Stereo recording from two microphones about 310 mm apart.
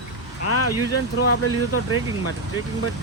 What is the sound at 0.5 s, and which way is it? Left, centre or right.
Speech, left.